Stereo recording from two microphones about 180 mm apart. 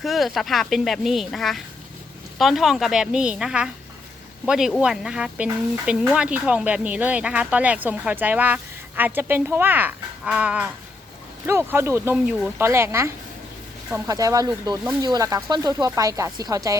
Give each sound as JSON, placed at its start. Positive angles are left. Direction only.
{"t": 0.0, "sound": "speech", "side_deg": 0}